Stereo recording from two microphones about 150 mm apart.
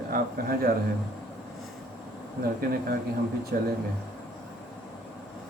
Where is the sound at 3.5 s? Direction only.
80° right.